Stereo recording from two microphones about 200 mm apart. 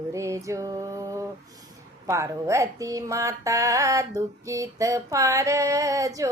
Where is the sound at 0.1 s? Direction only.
15° right (ahead or behind).